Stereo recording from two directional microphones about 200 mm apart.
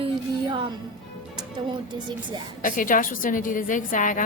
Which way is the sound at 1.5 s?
20° right (ahead or behind).